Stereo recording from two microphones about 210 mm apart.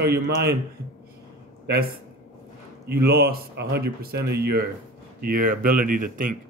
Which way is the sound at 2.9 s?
50° right (ahead or behind).